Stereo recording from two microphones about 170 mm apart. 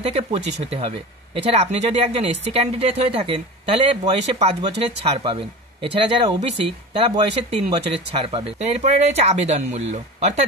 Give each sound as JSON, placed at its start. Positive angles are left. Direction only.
{"t": 0.0, "sound": "speech", "side_deg": -35}